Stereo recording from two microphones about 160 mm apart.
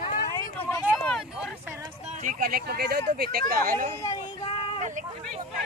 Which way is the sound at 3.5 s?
60° right (ahead or behind).